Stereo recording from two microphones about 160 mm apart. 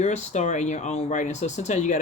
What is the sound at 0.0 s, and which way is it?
Speech, 45° left (ahead or behind).